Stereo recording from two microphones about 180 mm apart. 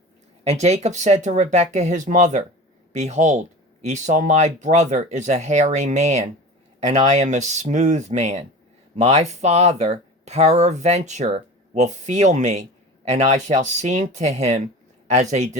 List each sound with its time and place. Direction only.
0.4 s speech: 40° right (ahead or behind)